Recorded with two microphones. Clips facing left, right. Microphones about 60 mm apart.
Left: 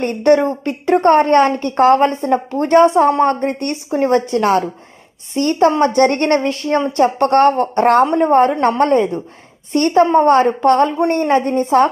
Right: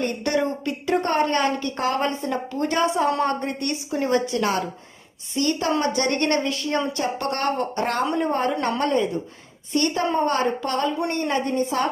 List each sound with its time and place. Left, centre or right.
0.0 s a woman's voice: left